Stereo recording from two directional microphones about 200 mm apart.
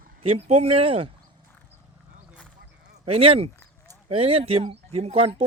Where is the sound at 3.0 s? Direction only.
30° right (ahead or behind).